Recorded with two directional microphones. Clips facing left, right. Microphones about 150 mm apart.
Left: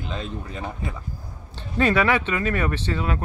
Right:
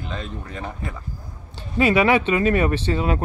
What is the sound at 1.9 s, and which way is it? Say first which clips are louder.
Speech: right 4 dB; 20° right (ahead or behind).